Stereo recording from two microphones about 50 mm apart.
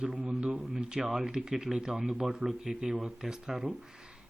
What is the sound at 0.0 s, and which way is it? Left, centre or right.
Speech, right.